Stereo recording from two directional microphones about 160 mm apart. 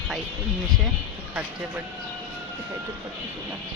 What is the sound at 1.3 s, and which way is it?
Speech, 10° right (ahead or behind).